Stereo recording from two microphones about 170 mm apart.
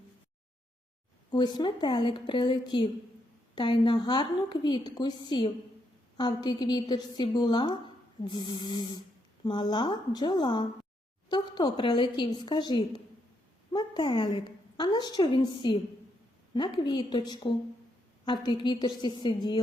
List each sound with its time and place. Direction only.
1.3 s a woman's voice: 25° left (ahead or behind)